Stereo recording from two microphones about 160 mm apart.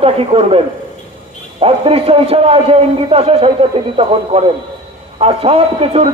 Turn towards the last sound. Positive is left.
turn(degrees=-40)  # may be behind; listen again after turning